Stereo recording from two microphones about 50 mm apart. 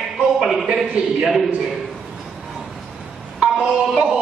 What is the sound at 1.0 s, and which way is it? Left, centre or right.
Speech, right.